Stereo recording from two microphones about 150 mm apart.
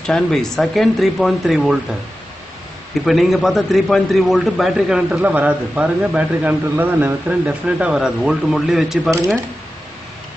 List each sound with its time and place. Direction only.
0.0 s a man's voice: 5° left (ahead or behind)
3.1 s a man's voice: centre (ahead or behind)
9.1 s speech: 20° right (ahead or behind)